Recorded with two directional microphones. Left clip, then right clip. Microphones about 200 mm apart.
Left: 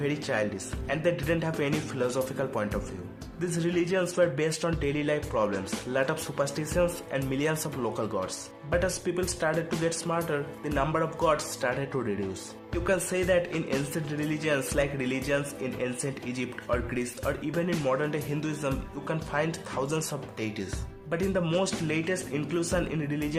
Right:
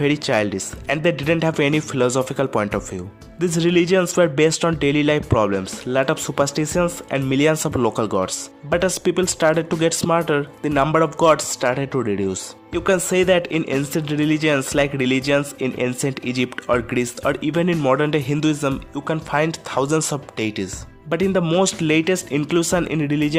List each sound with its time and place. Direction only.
0.0 s speech: 40° right (ahead or behind)